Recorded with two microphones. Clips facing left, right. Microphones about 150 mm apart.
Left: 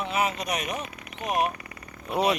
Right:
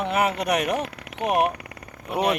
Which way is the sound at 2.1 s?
10° right (ahead or behind).